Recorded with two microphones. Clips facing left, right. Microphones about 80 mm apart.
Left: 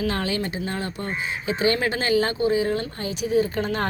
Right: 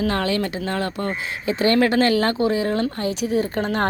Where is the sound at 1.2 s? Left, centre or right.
Right.